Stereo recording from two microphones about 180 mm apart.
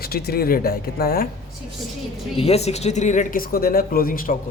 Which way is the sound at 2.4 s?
35° left (ahead or behind).